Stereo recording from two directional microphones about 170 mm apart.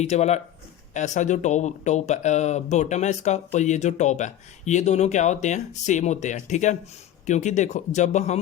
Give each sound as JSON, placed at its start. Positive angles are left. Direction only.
{"t": 0.0, "sound": "speech", "side_deg": 40}